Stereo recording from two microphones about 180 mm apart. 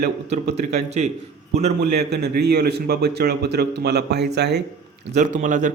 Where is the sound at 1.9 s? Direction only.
65° right (ahead or behind).